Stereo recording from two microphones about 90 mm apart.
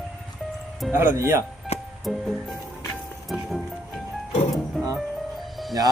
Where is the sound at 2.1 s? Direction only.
Centre (ahead or behind).